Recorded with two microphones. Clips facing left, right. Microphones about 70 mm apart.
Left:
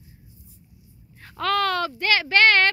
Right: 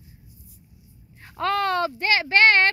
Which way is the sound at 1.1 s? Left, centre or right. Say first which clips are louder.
Left 1 dB; centre.